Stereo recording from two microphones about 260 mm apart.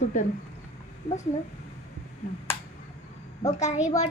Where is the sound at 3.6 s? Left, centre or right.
Left.